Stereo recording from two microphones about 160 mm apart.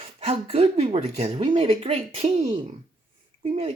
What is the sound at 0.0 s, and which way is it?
Speech, 35° right (ahead or behind).